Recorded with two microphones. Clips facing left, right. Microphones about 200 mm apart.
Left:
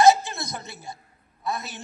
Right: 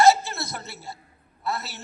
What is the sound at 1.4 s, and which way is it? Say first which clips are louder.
Speech: even; 15° left (ahead or behind).